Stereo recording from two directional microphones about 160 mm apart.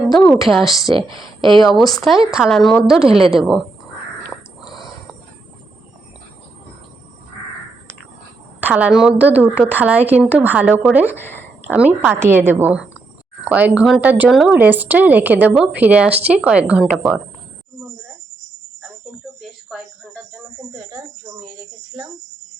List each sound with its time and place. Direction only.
0.4 s a woman's voice: centre (ahead or behind)
1.1 s speech: 30° right (ahead or behind)
1.5 s a woman's voice: centre (ahead or behind)
4.6 s a sound: centre (ahead or behind)
8.6 s a woman's voice: 10° right (ahead or behind)
11.2 s speech: 15° left (ahead or behind)
11.7 s a woman's voice: 10° right (ahead or behind)